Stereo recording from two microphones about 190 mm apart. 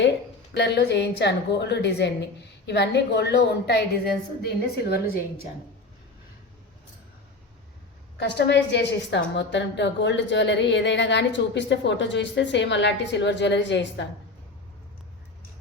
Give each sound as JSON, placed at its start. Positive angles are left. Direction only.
{"t": 0.5, "sound": "a woman's voice", "side_deg": 65}
{"t": 8.2, "sound": "a woman's voice", "side_deg": 65}